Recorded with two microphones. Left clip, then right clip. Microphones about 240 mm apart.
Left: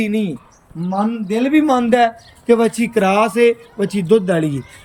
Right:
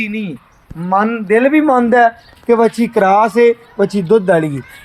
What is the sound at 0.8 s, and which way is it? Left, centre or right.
Speech, right.